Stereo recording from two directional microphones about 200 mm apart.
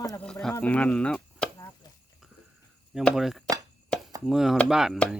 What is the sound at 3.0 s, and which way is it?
Speech, centre (ahead or behind).